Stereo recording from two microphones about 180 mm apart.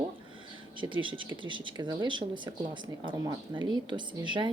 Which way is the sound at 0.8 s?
25° right (ahead or behind).